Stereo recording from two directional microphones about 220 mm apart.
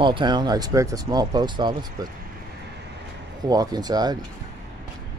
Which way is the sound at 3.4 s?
20° right (ahead or behind).